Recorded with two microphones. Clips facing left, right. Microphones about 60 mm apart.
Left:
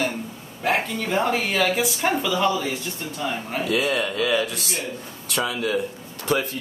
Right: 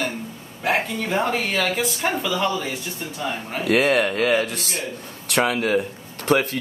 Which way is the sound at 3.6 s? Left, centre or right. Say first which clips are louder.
Right 6 dB; right.